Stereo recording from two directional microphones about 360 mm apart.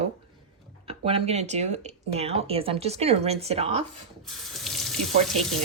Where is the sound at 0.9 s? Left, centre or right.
Centre.